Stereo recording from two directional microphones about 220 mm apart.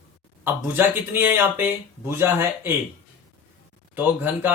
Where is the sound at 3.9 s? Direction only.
10° right (ahead or behind).